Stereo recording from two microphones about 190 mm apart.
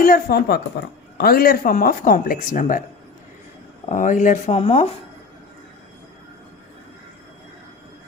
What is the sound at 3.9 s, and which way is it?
Speech, 45° left (ahead or behind).